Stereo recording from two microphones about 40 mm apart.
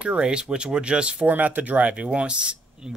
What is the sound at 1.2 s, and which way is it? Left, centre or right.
Speech, right.